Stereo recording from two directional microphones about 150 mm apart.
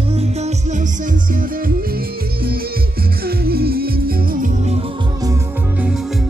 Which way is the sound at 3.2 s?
90° right.